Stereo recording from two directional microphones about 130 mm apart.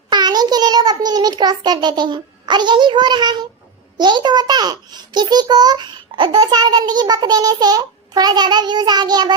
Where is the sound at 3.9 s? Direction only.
35° right (ahead or behind).